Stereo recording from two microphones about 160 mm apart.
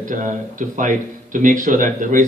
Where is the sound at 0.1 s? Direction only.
55° right (ahead or behind).